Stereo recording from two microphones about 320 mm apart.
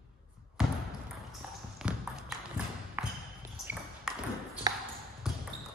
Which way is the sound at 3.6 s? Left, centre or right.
Centre.